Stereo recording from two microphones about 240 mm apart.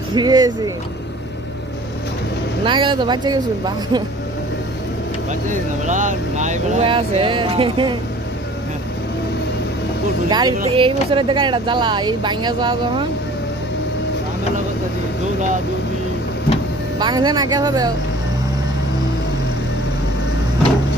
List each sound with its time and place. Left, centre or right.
0.1 s speech: centre
2.6 s speech: centre
5.3 s speech: right
10.2 s speech: centre
17.0 s speech: centre